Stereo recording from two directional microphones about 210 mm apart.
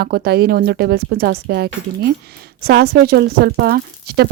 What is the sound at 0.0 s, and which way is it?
Speech, 50° right (ahead or behind).